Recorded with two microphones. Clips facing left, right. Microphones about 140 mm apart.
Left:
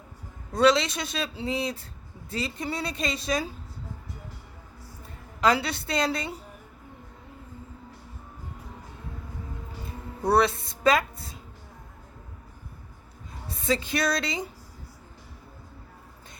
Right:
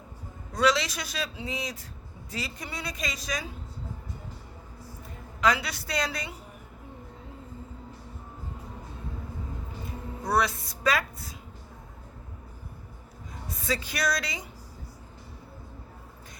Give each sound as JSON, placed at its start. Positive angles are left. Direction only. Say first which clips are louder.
{"t": 0.5, "sound": "a man's voice", "louder": "left 4 dB", "side_deg": 25}
{"t": 5.4, "sound": "a man's voice", "louder": "left 3 dB", "side_deg": 30}
{"t": 10.2, "sound": "a man's voice", "louder": "left 5 dB", "side_deg": 30}
{"t": 13.5, "sound": "music", "louder": "left 5 dB", "side_deg": 25}